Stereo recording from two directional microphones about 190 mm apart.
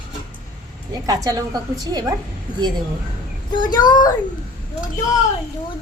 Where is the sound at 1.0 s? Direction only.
20° right (ahead or behind).